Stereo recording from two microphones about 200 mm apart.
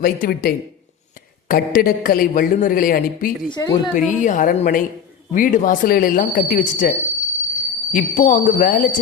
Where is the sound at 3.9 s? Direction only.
40° left (ahead or behind).